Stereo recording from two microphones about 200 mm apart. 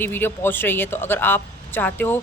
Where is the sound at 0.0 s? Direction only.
10° left (ahead or behind).